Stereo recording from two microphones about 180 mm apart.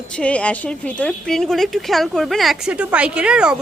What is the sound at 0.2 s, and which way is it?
A woman's voice, 5° left (ahead or behind).